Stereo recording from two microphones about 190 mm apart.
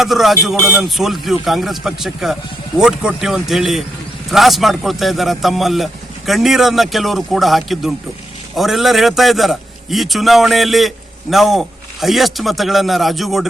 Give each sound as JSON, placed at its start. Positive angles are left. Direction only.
{"t": 0.0, "sound": "a man's voice", "side_deg": 0}